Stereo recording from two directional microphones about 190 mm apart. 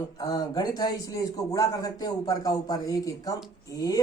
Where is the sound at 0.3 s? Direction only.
20° left (ahead or behind).